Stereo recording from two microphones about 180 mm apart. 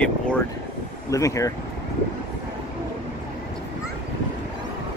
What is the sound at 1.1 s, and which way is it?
Speech, 15° left (ahead or behind).